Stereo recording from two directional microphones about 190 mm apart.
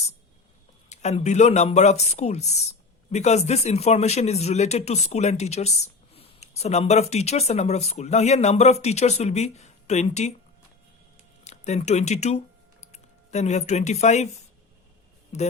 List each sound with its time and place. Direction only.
0.9 s speech: 35° left (ahead or behind)
11.4 s speech: 35° left (ahead or behind)